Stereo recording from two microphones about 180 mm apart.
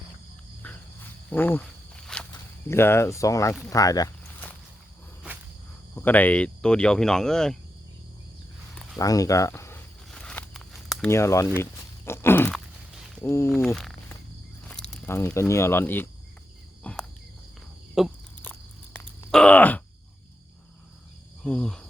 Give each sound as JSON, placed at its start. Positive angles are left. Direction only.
{"t": 0.6, "sound": "cricket", "side_deg": 10}
{"t": 2.1, "sound": "walk", "side_deg": 5}
{"t": 2.6, "sound": "speech", "side_deg": 15}
{"t": 6.0, "sound": "speech", "side_deg": 10}
{"t": 9.0, "sound": "speech", "side_deg": 20}
{"t": 10.1, "sound": "a sound", "side_deg": 5}
{"t": 11.1, "sound": "walk", "side_deg": 15}
{"t": 13.2, "sound": "speech", "side_deg": 15}
{"t": 13.5, "sound": "speech", "side_deg": 0}
{"t": 16.8, "sound": "cricket", "side_deg": 5}
{"t": 18.0, "sound": "insect", "side_deg": 0}
{"t": 18.9, "sound": "groan", "side_deg": 5}
{"t": 21.4, "sound": "cricket", "side_deg": 5}